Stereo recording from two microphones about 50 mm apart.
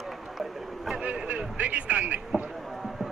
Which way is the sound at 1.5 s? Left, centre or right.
Right.